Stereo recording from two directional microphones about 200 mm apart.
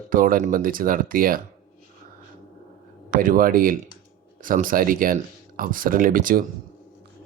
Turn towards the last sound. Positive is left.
turn(degrees=-45)  # may be behind; listen again after turning